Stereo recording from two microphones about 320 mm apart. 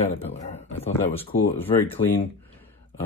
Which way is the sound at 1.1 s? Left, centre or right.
Centre.